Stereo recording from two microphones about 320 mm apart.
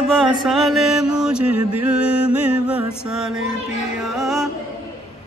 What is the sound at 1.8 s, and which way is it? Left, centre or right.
Mantra, centre.